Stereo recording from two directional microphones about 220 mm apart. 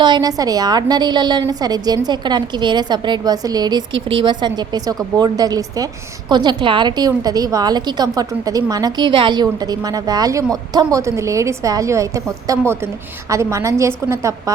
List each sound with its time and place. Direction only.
0.0 s a woman's voice: 20° right (ahead or behind)